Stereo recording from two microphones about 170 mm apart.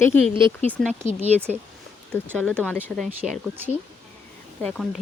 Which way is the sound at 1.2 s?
10° right (ahead or behind).